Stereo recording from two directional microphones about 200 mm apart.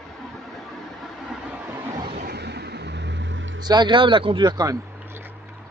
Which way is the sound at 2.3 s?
55° right (ahead or behind).